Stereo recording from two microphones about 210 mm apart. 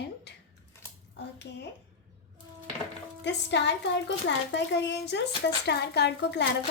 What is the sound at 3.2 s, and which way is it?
A woman's voice, 55° left (ahead or behind).